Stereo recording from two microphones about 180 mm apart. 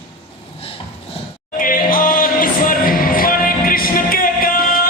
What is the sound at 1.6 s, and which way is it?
Music, 50° left (ahead or behind).